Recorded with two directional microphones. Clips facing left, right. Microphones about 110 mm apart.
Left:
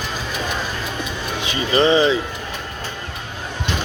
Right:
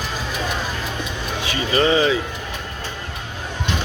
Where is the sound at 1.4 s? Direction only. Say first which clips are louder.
Left 2 dB; 25° left (ahead or behind).